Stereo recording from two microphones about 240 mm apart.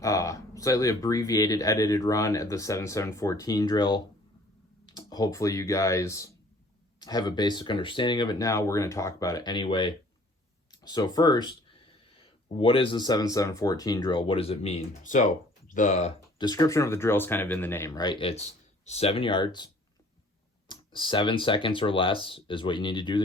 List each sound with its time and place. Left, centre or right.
0.0 s speech: centre